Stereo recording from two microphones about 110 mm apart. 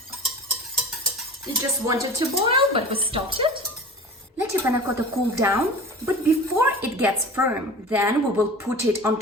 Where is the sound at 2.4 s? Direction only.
60° right (ahead or behind).